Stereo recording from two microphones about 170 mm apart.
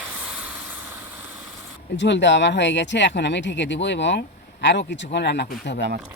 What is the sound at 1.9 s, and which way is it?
Speech, 90° left.